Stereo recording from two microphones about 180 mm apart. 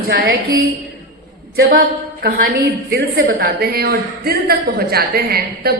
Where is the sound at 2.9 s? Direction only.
60° right (ahead or behind).